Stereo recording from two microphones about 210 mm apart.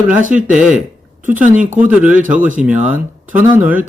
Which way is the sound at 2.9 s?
10° right (ahead or behind).